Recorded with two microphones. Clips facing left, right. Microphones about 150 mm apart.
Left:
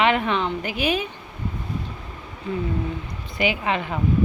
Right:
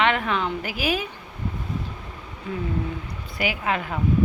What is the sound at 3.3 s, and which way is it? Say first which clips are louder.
Speech: left 2 dB; 5° right (ahead or behind).